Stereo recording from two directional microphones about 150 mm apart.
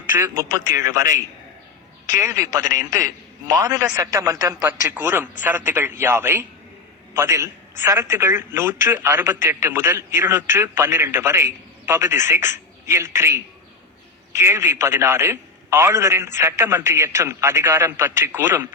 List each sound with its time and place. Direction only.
0.4 s a man's voice: 20° right (ahead or behind)
14.4 s speech: 15° right (ahead or behind)